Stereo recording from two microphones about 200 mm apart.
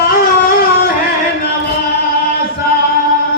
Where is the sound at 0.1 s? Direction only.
45° left (ahead or behind).